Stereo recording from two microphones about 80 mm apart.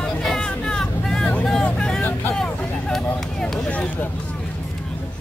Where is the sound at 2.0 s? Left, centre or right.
Left.